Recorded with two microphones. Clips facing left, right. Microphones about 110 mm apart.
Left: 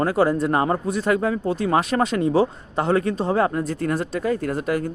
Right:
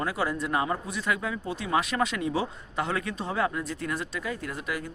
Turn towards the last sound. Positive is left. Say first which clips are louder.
# left 10 dB
turn(degrees=45)  # may be behind; listen again after turning